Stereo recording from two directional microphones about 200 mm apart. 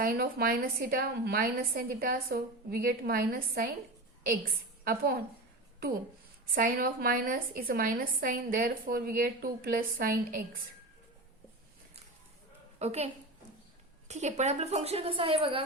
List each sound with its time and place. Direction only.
0.0 s a woman's voice: 50° right (ahead or behind)
4.8 s a woman's voice: 50° right (ahead or behind)
6.4 s a woman's voice: 45° right (ahead or behind)
12.8 s a woman's voice: 30° right (ahead or behind)
14.1 s a woman's voice: 35° right (ahead or behind)